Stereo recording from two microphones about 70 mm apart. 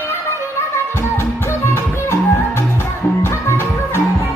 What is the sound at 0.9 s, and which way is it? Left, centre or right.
Music, left.